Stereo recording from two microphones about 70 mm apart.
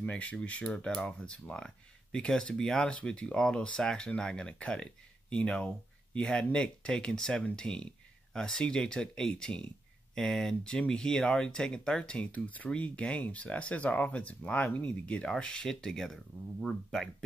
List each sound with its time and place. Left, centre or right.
0.0 s speech: left